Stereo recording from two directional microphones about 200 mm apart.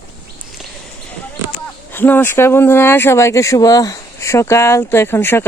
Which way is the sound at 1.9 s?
10° left (ahead or behind).